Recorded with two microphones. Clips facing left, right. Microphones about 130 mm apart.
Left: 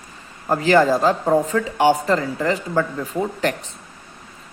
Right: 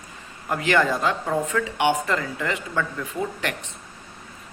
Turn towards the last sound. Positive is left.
turn(degrees=35)  # may be behind; listen again after turning